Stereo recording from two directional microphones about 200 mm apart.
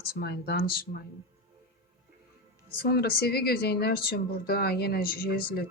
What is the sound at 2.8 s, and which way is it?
Speech, 50° left (ahead or behind).